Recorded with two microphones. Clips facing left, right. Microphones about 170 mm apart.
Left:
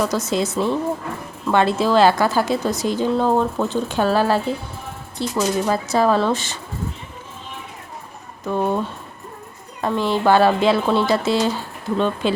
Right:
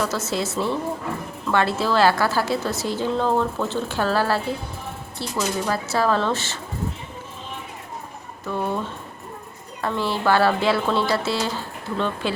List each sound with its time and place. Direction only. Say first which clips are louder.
0.0 s a woman's voice: left 4 dB; 15° left (ahead or behind)
8.4 s speech: left 5 dB; 20° left (ahead or behind)
9.8 s a woman's voice: left 4 dB; 20° left (ahead or behind)